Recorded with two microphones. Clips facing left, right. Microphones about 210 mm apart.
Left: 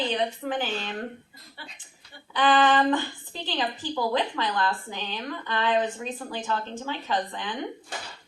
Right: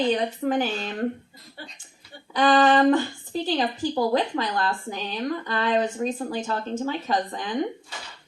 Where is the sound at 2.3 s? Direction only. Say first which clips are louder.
Right 3 dB; 45° right (ahead or behind).